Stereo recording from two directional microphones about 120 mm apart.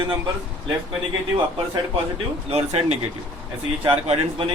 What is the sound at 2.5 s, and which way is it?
Speech, 60° right (ahead or behind).